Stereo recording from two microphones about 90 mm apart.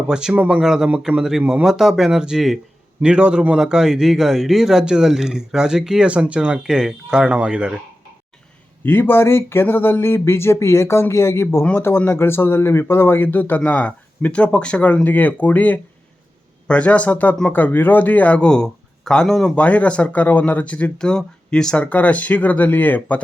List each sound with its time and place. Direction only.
0.1 s a man's voice: 10° right (ahead or behind)
0.6 s a man's voice: 5° right (ahead or behind)
8.8 s speech: 25° left (ahead or behind)